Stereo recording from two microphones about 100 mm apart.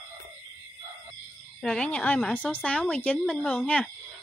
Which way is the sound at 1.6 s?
10° left (ahead or behind).